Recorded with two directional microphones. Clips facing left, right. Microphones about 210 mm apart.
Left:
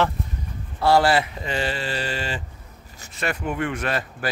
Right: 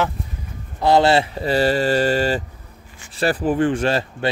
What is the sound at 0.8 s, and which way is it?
Speech, 20° right (ahead or behind).